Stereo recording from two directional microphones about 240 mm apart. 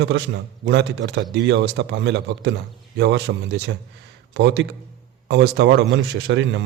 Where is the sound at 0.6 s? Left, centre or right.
Right.